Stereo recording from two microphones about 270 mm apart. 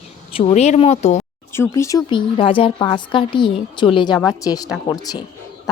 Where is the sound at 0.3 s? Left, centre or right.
Left.